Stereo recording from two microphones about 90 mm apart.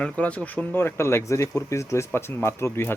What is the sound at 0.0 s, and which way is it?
Speech, 15° left (ahead or behind).